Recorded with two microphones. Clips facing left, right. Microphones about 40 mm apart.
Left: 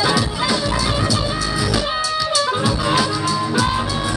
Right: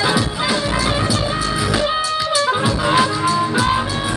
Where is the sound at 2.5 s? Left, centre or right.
Centre.